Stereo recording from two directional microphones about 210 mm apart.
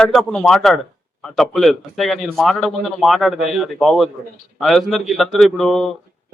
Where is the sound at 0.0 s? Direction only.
Centre (ahead or behind).